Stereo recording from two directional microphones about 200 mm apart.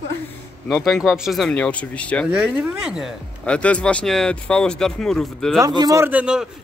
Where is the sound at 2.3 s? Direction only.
5° right (ahead or behind).